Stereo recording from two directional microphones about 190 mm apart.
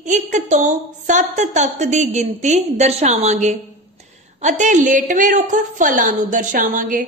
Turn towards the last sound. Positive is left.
turn(degrees=-45)  # may be behind; listen again after turning